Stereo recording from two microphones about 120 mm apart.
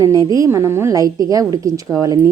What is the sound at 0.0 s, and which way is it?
A woman's voice, 30° right (ahead or behind).